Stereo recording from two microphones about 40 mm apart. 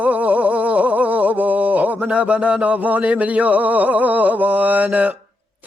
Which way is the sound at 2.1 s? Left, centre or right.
Right.